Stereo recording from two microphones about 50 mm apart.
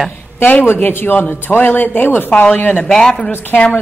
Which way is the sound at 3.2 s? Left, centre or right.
Left.